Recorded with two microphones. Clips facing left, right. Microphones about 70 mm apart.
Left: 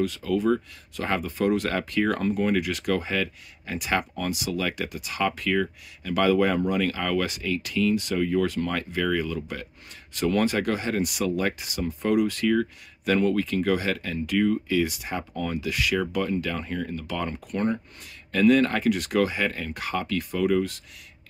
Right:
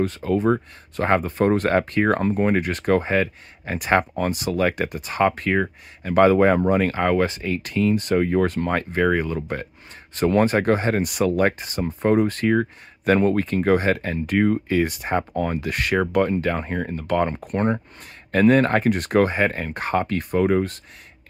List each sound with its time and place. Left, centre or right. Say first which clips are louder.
0.0 s speech: right 3 dB; right